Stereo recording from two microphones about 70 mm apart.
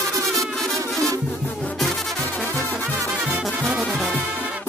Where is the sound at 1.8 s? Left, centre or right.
Centre.